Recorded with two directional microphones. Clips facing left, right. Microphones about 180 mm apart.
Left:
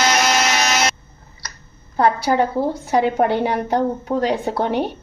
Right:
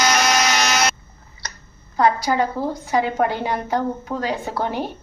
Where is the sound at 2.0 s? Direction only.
60° left (ahead or behind).